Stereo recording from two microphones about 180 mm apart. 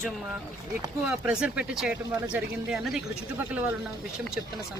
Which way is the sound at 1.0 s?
5° right (ahead or behind).